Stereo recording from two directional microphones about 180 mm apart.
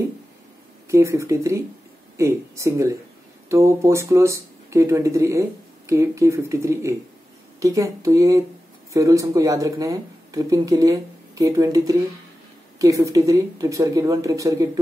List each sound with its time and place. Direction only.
0.8 s speech: 15° right (ahead or behind)